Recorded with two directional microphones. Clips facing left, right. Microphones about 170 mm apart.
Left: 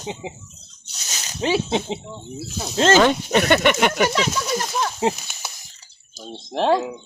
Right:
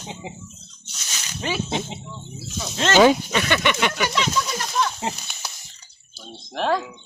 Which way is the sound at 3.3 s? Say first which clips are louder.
Left 5 dB; 55° left (ahead or behind).